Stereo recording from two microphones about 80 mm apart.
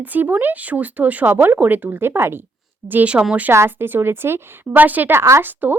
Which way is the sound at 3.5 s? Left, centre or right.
Right.